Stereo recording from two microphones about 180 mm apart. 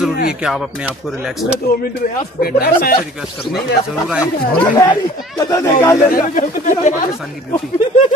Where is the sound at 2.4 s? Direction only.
55° left (ahead or behind).